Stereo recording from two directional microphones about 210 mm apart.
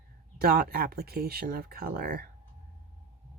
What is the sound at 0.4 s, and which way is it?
Speech, 45° right (ahead or behind).